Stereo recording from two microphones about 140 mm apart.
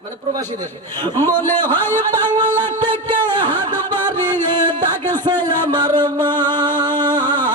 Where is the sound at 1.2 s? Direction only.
15° left (ahead or behind).